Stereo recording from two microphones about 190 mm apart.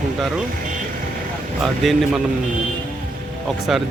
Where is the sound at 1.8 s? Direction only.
Centre (ahead or behind).